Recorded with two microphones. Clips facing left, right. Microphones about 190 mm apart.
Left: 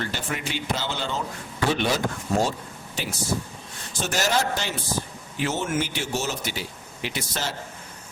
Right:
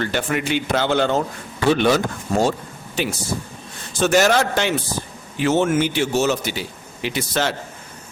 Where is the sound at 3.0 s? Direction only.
65° right (ahead or behind).